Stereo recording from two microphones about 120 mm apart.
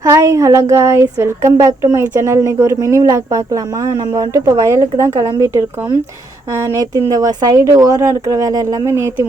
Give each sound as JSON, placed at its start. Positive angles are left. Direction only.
{"t": 0.0, "sound": "speech", "side_deg": -25}